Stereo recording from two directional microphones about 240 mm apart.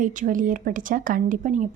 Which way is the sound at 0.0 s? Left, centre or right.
Right.